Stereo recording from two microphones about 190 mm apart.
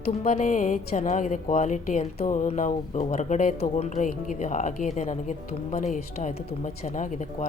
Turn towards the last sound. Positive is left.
turn(degrees=40)  # may be behind; listen again after turning